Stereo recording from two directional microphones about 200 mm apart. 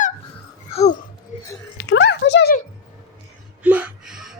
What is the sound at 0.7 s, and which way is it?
Babbling, 35° left (ahead or behind).